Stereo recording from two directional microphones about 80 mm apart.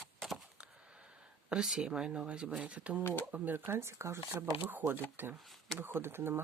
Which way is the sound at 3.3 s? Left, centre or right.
Right.